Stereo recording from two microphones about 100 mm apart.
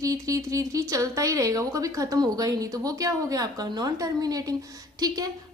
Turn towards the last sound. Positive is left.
turn(degrees=-40)  # may be behind; listen again after turning